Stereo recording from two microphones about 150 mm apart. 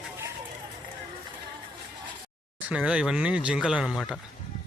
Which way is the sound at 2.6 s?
10° right (ahead or behind).